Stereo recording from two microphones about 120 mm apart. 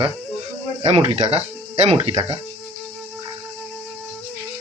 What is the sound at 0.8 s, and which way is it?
Speech, 55° right (ahead or behind).